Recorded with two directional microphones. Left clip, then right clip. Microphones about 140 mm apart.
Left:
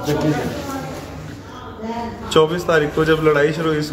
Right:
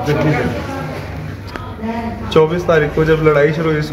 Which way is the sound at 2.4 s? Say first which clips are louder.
Right 3 dB; 5° left (ahead or behind).